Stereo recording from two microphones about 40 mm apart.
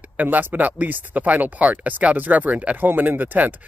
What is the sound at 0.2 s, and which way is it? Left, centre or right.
Speech, right.